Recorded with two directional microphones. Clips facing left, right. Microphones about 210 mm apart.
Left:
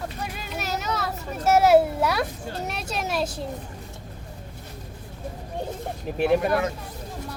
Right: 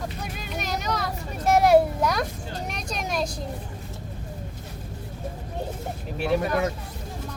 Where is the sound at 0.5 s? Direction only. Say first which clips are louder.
Even; 5° left (ahead or behind).